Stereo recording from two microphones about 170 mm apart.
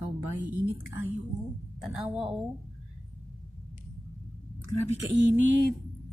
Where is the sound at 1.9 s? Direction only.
5° right (ahead or behind).